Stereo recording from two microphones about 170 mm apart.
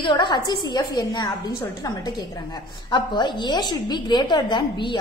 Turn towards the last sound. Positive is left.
turn(degrees=30)  # may be behind; listen again after turning